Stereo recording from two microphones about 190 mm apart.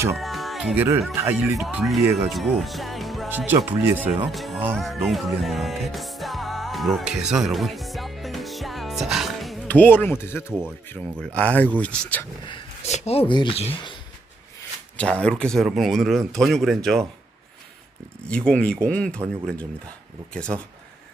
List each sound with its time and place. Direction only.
0.1 s music: centre (ahead or behind)
1.1 s speech: 10° right (ahead or behind)
3.2 s speech: 10° right (ahead or behind)
4.7 s music: centre (ahead or behind)
10.8 s speech: 10° left (ahead or behind)
12.5 s speech: 30° left (ahead or behind)
14.9 s speech: 5° left (ahead or behind)
18.3 s speech: 5° left (ahead or behind)